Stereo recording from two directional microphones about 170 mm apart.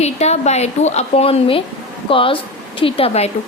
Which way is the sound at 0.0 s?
40° left (ahead or behind).